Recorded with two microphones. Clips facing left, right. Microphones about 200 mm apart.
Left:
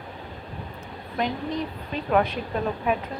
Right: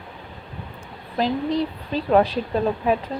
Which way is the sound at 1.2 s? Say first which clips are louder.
Right 6 dB; 35° right (ahead or behind).